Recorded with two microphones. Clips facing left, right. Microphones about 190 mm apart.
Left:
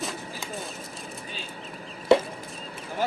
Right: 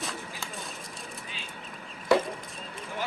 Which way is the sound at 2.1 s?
25° left (ahead or behind).